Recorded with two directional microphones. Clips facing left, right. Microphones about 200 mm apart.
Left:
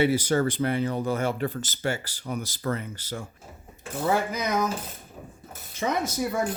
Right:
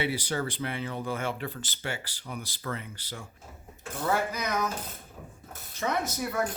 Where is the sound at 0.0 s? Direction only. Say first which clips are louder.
Left 8 dB; 45° left (ahead or behind).